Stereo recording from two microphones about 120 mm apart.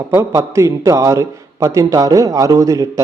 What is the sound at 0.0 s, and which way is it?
A man's voice, 25° right (ahead or behind).